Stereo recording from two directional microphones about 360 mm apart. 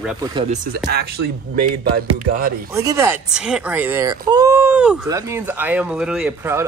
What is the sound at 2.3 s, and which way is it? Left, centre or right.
Speech, right.